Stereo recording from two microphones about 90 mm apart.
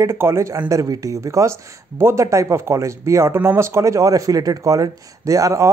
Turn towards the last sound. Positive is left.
turn(degrees=-35)  # may be behind; listen again after turning